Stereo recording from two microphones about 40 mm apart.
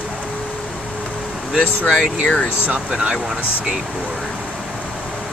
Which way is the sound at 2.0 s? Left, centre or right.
Left.